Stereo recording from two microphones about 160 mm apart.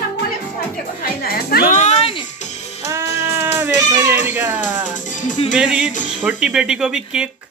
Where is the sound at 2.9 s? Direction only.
15° right (ahead or behind).